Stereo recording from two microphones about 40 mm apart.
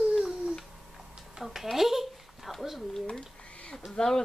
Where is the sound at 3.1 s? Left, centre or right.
Left.